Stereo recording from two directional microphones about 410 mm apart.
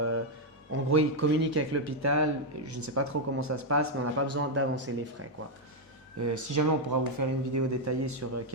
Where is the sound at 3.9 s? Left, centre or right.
Right.